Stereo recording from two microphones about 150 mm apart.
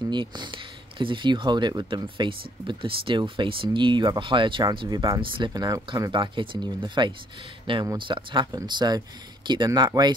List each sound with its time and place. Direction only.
0.1 s speech: 30° right (ahead or behind)
6.1 s speech: 35° right (ahead or behind)